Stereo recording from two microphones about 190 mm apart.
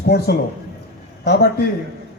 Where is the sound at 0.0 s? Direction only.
55° left (ahead or behind).